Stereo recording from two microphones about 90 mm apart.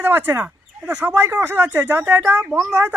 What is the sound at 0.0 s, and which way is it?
Speech, 25° right (ahead or behind).